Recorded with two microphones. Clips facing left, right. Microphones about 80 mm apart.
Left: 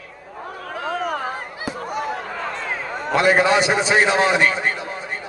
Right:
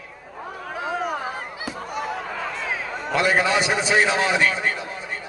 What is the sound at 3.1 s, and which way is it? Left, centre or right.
A man's voice, left.